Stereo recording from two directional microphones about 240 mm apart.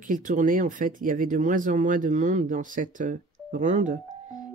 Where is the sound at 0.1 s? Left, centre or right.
Right.